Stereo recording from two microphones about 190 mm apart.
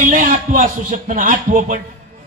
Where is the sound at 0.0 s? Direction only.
45° right (ahead or behind).